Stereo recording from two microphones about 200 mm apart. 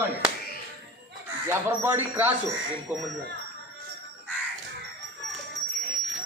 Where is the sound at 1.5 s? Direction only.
10° right (ahead or behind).